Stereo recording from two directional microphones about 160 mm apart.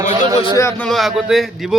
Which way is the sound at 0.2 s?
25° right (ahead or behind).